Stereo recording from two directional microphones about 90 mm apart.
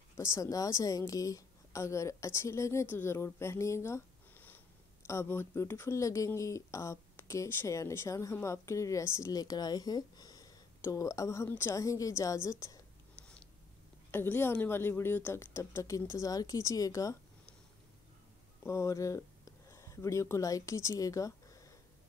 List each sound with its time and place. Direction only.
0.2 s a woman's voice: 35° left (ahead or behind)
9.3 s a woman's voice: 45° left (ahead or behind)
13.1 s a sound: 15° left (ahead or behind)
14.1 s a woman's voice: 25° left (ahead or behind)
18.6 s a woman's voice: 30° left (ahead or behind)